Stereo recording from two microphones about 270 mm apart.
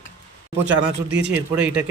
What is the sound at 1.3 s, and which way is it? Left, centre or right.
Speech, centre.